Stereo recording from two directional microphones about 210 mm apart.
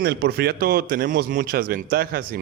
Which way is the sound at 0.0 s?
50° right (ahead or behind).